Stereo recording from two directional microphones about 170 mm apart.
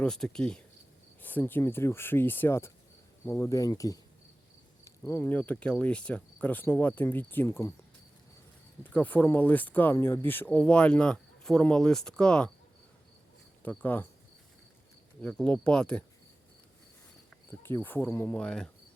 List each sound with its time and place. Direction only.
0.0 s speech: 5° left (ahead or behind)
3.2 s cricket: 15° left (ahead or behind)
4.9 s speech: 15° left (ahead or behind)
8.8 s speech: 10° left (ahead or behind)
13.6 s speech: 10° left (ahead or behind)
15.2 s speech: 5° left (ahead or behind)
17.6 s speech: 10° left (ahead or behind)